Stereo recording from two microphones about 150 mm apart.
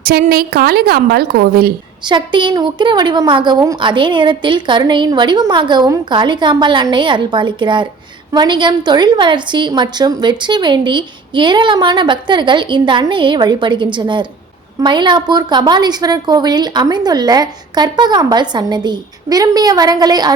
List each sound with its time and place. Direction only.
0.0 s a woman's voice: 85° right
2.0 s a woman's voice: 30° right (ahead or behind)